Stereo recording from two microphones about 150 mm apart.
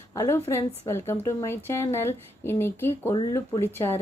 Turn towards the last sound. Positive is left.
turn(degrees=15)  # may be behind; listen again after turning